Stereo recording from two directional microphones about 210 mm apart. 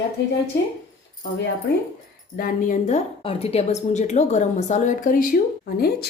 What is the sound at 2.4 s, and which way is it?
A woman's voice, 40° left (ahead or behind).